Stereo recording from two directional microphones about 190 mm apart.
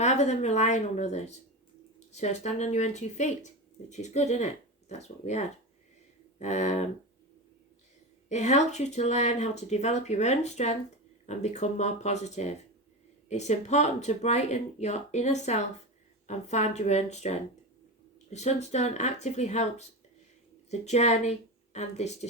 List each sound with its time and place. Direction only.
0.0 s speech: 35° left (ahead or behind)
8.3 s speech: 40° left (ahead or behind)